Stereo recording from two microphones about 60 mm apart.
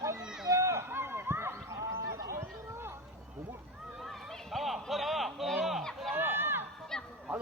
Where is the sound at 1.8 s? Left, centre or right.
Right.